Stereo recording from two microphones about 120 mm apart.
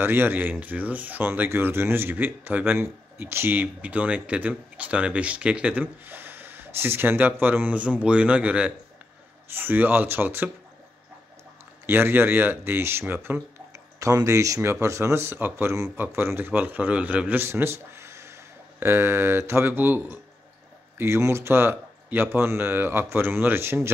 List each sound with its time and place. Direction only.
0.0 s speech: 20° right (ahead or behind)
11.8 s speech: 20° right (ahead or behind)
13.9 s speech: 25° right (ahead or behind)